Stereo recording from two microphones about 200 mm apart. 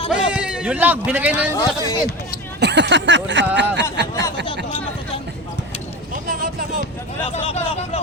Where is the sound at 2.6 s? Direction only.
60° right (ahead or behind).